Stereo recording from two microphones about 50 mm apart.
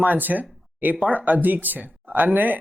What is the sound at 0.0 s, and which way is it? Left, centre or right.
Speech, right.